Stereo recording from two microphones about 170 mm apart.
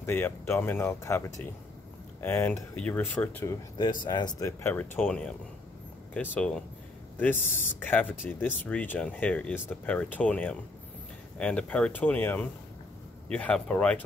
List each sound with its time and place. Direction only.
0.0 s speech: 15° left (ahead or behind)
4.0 s speech: 25° left (ahead or behind); by 5.3 s 5° left (ahead or behind)
6.3 s speech: 5° left (ahead or behind)